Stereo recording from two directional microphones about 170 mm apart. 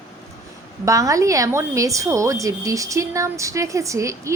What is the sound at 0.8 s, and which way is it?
A woman's voice, 20° right (ahead or behind).